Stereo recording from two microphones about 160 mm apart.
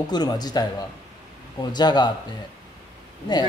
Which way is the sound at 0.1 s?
25° left (ahead or behind).